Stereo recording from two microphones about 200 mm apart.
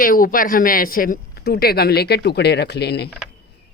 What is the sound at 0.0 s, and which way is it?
Speech, 45° left (ahead or behind).